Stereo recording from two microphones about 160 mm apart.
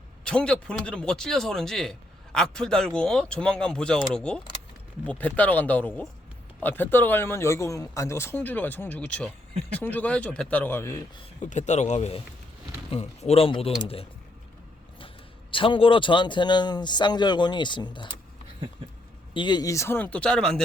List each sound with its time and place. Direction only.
0.3 s speech: 5° left (ahead or behind)
11.4 s speech: 50° left (ahead or behind)
15.5 s speech: 35° left (ahead or behind)
19.3 s speech: 30° left (ahead or behind); by 20.6 s 5° left (ahead or behind)